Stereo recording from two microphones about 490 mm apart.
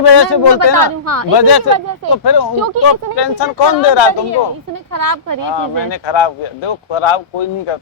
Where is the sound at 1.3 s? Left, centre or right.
Left.